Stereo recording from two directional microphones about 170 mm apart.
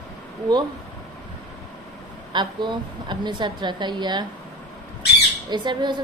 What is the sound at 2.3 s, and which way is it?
A woman's voice, 25° right (ahead or behind).